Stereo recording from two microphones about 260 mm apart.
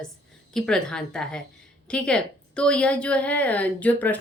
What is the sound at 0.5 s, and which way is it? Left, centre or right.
A woman's voice, centre.